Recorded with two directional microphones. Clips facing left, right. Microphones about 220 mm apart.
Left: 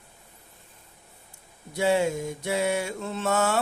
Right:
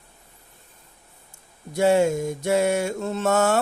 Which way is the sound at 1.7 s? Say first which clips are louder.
Right 5 dB; 45° right (ahead or behind).